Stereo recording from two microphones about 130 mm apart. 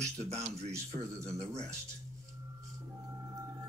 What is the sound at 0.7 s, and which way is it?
Speech, 20° right (ahead or behind).